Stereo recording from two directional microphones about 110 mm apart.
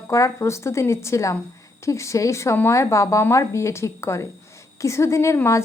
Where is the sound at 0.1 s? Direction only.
25° left (ahead or behind).